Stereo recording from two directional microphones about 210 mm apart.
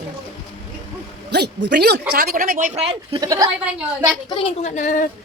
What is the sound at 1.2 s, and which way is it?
Speech, 50° right (ahead or behind).